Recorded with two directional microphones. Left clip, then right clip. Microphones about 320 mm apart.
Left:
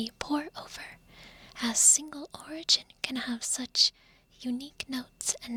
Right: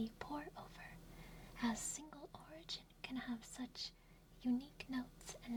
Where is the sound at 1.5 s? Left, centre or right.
Left.